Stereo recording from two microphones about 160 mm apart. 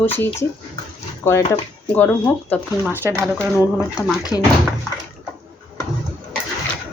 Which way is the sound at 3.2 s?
5° right (ahead or behind).